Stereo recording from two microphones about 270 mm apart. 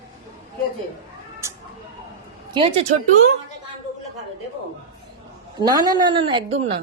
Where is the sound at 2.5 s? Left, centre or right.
Centre.